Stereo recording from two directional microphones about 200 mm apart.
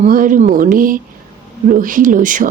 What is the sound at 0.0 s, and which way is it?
Speech, 40° right (ahead or behind).